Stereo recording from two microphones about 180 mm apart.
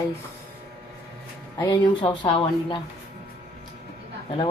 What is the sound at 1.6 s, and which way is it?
Speech, 25° left (ahead or behind).